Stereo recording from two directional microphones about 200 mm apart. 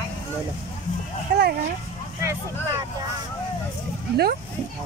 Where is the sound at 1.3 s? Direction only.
55° right (ahead or behind).